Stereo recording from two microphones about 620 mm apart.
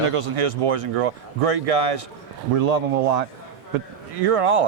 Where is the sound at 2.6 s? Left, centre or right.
Right.